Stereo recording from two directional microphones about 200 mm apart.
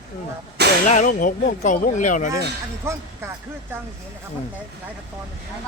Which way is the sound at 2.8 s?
15° right (ahead or behind).